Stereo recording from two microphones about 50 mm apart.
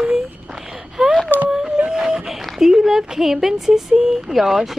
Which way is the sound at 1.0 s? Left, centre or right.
Centre.